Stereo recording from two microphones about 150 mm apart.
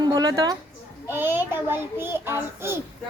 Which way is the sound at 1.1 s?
15° right (ahead or behind).